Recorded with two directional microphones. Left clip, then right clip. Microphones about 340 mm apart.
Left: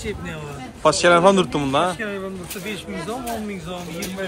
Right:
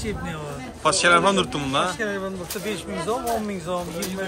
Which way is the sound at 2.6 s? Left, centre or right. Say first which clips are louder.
Right 2 dB; right.